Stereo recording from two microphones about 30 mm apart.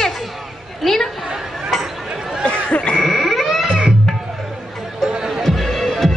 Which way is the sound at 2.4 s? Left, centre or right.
Left.